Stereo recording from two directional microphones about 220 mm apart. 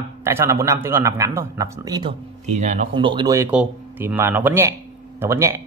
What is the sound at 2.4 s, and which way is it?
Speech, 30° right (ahead or behind).